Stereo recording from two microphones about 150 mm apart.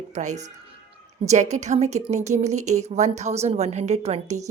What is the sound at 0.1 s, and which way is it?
A woman's voice, 50° right (ahead or behind).